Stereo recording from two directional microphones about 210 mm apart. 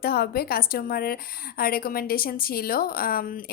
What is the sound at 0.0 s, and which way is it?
A woman's voice, 45° left (ahead or behind).